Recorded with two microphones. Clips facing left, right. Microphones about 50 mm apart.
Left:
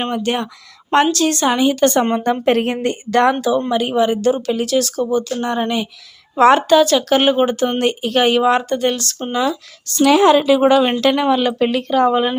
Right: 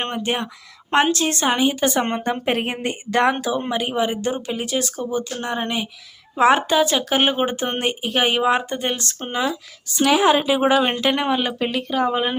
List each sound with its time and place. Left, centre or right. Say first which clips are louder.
0.0 s speech: left 4 dB; right
1.1 s a woman's voice: left 4 dB; right
7.9 s speech: left 4 dB; centre
11.6 s speech: left 6 dB; centre